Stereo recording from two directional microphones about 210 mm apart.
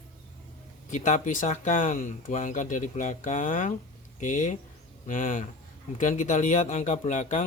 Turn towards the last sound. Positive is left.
turn(degrees=35)  # may be behind; listen again after turning